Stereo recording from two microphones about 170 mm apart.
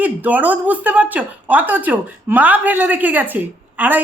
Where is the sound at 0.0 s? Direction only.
10° right (ahead or behind).